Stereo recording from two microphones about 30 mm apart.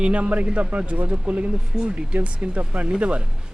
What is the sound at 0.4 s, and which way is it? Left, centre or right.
Speech, right.